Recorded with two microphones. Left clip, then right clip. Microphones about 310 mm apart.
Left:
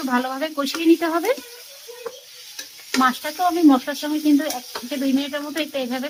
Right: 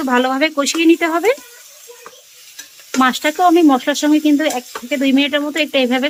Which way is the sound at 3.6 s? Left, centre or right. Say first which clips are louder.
Right 4 dB; right.